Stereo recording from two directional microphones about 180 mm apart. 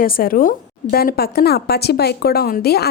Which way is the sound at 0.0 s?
55° left (ahead or behind).